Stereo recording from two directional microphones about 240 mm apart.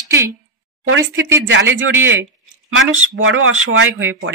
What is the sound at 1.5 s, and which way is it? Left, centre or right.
Speech, right.